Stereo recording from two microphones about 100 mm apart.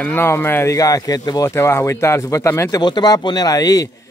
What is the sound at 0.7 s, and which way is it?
Speech, 35° left (ahead or behind).